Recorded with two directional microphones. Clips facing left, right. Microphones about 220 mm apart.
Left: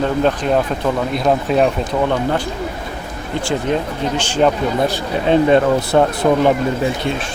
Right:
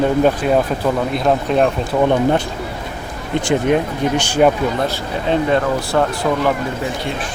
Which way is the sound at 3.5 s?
15° right (ahead or behind).